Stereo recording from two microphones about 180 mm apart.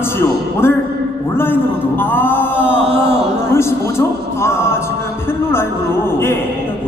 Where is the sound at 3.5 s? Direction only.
15° left (ahead or behind).